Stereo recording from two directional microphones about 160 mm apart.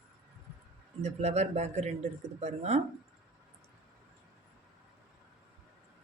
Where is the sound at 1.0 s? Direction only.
45° right (ahead or behind).